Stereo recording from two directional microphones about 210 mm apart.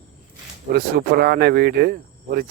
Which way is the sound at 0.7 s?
45° right (ahead or behind).